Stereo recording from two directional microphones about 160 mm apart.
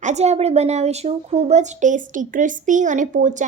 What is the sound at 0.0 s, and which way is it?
Speech, 45° right (ahead or behind).